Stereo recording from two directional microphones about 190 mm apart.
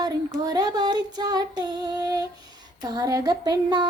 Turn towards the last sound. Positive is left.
turn(degrees=-20)  # may be behind; listen again after turning